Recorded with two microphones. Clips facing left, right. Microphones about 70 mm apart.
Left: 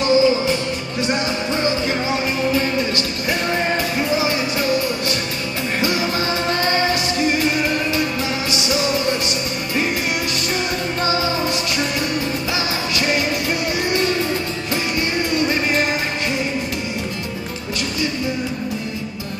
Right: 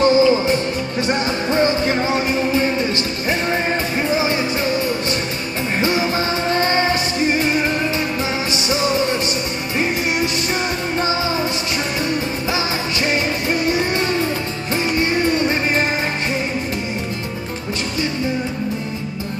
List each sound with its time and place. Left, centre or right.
0.0 s music: right
5.8 s music: right
13.0 s music: right